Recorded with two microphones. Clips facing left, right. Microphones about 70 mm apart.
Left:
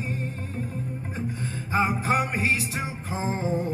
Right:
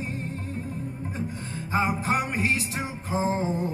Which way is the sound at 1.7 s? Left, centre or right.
Left.